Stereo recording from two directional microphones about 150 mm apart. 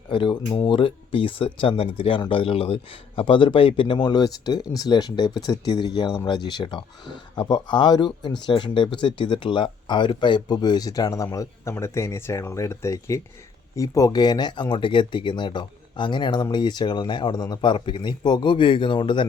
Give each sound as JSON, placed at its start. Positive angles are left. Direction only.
{"t": 0.1, "sound": "speech", "side_deg": 30}